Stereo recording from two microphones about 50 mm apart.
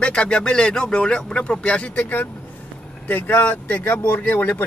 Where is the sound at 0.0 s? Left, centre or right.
Left.